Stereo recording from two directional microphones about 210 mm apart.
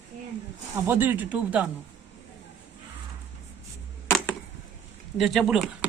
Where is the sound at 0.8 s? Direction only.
10° right (ahead or behind).